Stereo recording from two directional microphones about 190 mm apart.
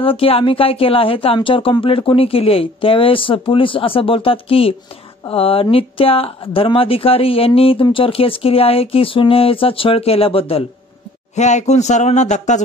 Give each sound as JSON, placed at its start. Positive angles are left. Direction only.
{"t": 0.0, "sound": "speech", "side_deg": 30}